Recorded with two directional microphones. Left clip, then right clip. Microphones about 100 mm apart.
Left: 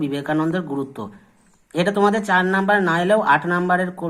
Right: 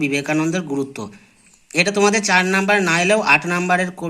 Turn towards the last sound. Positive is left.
turn(degrees=-35)  # may be behind; listen again after turning